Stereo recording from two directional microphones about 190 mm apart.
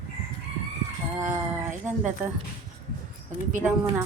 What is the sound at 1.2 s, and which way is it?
Speech, 40° right (ahead or behind).